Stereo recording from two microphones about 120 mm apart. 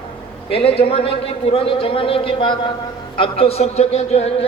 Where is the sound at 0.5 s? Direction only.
55° left (ahead or behind).